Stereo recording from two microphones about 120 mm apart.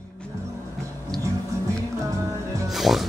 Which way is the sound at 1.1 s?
5° left (ahead or behind).